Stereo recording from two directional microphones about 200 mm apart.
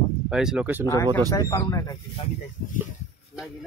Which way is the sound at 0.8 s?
15° left (ahead or behind).